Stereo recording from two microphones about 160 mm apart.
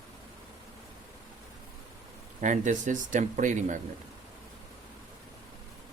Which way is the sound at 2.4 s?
50° right (ahead or behind).